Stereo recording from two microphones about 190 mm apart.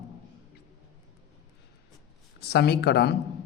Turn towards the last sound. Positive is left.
turn(degrees=55)  # may be behind; listen again after turning